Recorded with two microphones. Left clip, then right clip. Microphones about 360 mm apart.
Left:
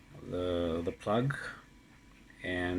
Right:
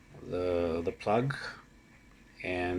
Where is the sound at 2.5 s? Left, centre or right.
Right.